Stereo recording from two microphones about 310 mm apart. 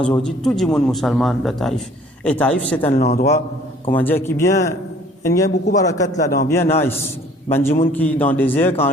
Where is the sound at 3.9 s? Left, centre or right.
Centre.